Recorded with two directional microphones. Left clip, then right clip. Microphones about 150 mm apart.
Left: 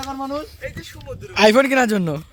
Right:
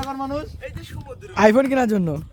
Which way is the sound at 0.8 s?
55° right (ahead or behind).